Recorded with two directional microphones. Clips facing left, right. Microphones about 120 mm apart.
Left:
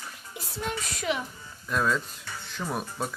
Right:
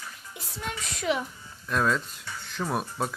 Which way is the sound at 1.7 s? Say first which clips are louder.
Right 1 dB; centre (ahead or behind).